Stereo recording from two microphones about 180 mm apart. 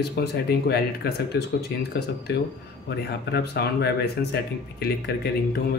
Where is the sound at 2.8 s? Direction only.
65° left (ahead or behind).